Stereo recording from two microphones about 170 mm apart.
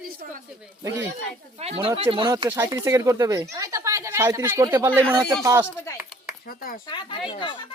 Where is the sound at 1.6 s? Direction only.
35° right (ahead or behind); by 5.6 s 20° right (ahead or behind).